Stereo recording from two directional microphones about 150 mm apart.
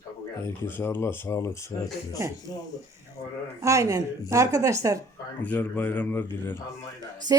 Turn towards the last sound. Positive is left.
turn(degrees=-25)  # may be behind; listen again after turning